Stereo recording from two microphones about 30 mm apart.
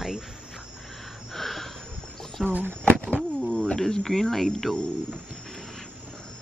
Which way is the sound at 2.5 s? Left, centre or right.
Right.